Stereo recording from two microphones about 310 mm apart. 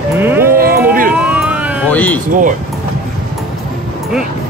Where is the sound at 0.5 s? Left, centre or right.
Right.